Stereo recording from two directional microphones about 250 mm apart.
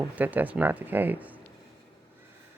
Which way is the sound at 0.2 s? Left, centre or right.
Centre.